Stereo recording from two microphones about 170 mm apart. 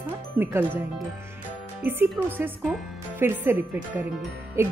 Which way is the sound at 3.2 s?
15° right (ahead or behind).